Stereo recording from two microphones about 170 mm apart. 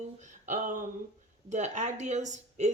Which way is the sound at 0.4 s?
50° right (ahead or behind).